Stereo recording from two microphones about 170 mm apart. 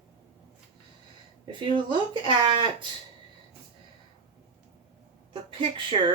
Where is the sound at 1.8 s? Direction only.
30° right (ahead or behind).